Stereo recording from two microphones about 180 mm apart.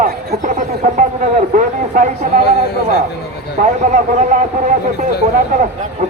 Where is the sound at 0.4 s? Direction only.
40° right (ahead or behind).